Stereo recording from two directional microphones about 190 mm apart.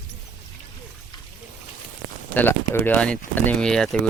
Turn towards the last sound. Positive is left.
turn(degrees=5)  # may be behind; listen again after turning